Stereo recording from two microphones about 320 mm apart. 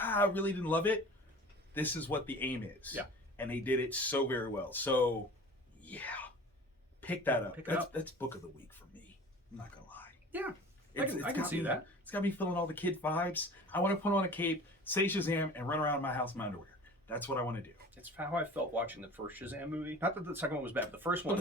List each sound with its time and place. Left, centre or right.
0.0 s speech: centre
5.8 s a sound: centre
7.0 s speech: centre
7.5 s speech: centre
10.3 s speech: centre
12.0 s speech: centre
17.9 s speech: centre